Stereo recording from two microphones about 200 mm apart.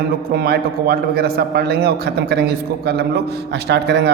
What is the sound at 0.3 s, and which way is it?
A man's voice, 50° right (ahead or behind).